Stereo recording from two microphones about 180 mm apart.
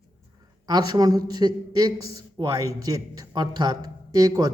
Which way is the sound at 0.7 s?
20° right (ahead or behind).